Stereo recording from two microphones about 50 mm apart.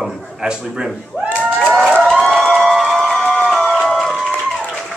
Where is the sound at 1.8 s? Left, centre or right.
Centre.